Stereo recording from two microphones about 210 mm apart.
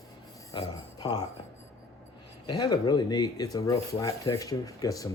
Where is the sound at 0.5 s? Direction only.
20° left (ahead or behind).